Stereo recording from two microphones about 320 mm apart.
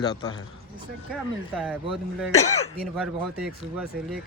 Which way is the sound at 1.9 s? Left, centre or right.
Centre.